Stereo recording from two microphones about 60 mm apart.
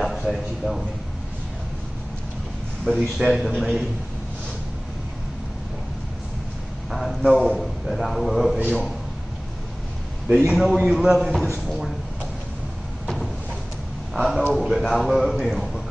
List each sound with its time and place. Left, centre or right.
0.0 s a sound: centre
2.9 s a man's voice: right
3.3 s a man's voice: centre
6.9 s a man's voice: centre
8.5 s a man's voice: right
10.6 s a man's voice: centre
13.0 s a sound: centre
14.1 s a man's voice: centre